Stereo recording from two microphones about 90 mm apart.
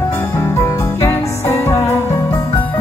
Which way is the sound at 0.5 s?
30° left (ahead or behind).